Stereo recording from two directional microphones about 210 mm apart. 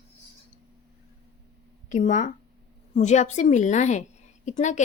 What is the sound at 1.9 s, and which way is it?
A woman's voice, 35° left (ahead or behind).